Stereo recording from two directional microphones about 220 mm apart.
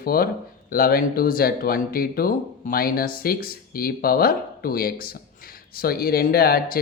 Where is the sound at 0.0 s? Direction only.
40° left (ahead or behind).